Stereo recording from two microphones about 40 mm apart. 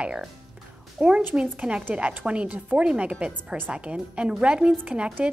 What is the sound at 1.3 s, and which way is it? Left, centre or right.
A woman's voice, right.